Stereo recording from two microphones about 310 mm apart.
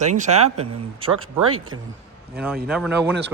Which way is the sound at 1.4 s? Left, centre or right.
Right.